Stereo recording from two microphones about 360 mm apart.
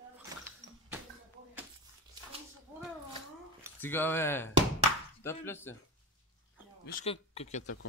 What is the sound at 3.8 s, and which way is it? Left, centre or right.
Speech, centre.